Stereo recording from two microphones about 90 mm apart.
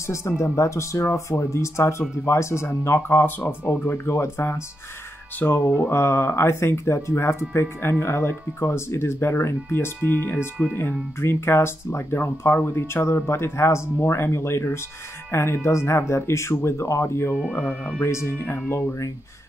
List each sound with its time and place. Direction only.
0.0 s speech: 30° left (ahead or behind)
5.4 s speech: 20° left (ahead or behind)
5.8 s speech: 30° left (ahead or behind)
17.5 s speech: 15° left (ahead or behind)
18.0 s speech: 30° left (ahead or behind)